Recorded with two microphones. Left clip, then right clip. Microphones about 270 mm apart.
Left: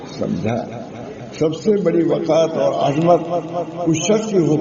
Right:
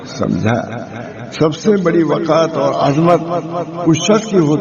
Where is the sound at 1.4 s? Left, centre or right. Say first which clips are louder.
Right 3 dB; right.